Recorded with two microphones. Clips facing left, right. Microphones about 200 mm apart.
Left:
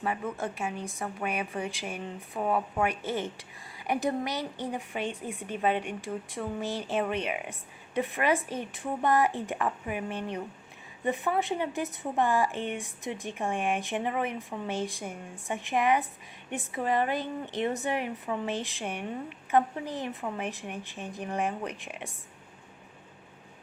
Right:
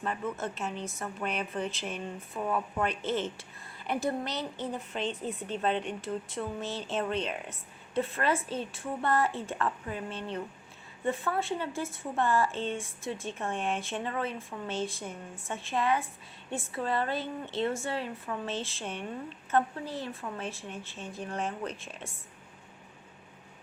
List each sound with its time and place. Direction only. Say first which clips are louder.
0.0 s a woman's voice: left 2 dB; 15° left (ahead or behind)